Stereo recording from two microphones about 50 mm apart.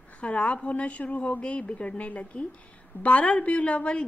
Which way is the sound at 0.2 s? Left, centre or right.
Left.